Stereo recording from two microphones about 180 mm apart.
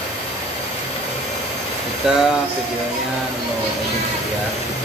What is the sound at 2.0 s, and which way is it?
Speech, 5° right (ahead or behind).